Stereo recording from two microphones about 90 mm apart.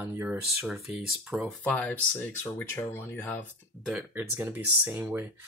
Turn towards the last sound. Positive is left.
turn(degrees=-25)  # may be behind; listen again after turning